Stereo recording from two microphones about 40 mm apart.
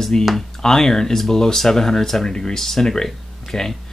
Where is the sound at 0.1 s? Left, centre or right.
Centre.